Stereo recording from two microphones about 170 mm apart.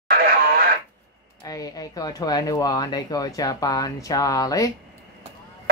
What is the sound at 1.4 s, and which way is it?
Speech, 20° left (ahead or behind).